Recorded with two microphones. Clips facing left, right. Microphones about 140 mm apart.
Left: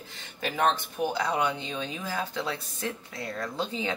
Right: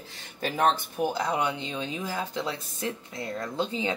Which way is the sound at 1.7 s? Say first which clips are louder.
Right 1 dB; 20° right (ahead or behind).